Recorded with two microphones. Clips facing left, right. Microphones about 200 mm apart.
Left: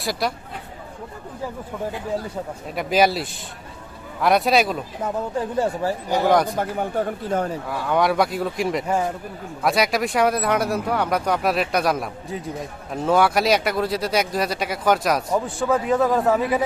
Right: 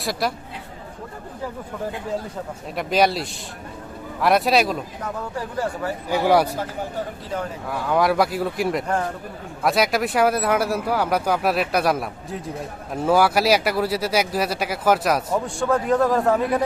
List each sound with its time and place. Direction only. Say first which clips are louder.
0.0 s speech: even; centre (ahead or behind)
2.7 s speech: left 1 dB; centre (ahead or behind)
5.5 s speech: left 3 dB; 25° left (ahead or behind)
6.1 s speech: right 1 dB; 10° right (ahead or behind)
6.6 s speech: left 4 dB; 55° left (ahead or behind)
7.7 s speech: right 2 dB; centre (ahead or behind)